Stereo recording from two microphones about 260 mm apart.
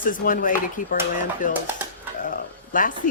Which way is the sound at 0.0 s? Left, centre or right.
Left.